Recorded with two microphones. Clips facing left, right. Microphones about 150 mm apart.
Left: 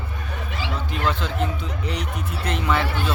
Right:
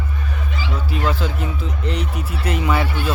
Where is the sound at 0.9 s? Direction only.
5° right (ahead or behind).